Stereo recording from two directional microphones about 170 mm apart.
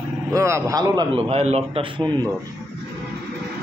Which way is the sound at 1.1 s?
35° right (ahead or behind).